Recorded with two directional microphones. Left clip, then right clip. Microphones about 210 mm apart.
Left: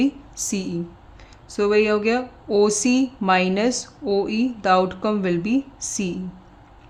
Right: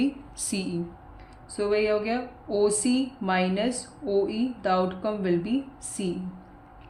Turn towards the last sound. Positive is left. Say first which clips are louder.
# left 7 dB
turn(degrees=40)  # may be behind; listen again after turning